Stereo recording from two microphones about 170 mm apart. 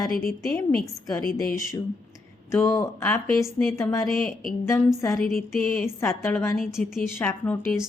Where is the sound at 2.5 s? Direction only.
15° left (ahead or behind).